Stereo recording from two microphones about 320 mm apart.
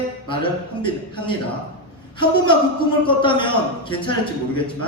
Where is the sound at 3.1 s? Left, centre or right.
Centre.